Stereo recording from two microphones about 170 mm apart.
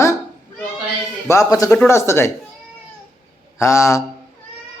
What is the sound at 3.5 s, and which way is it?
Speech, 15° left (ahead or behind).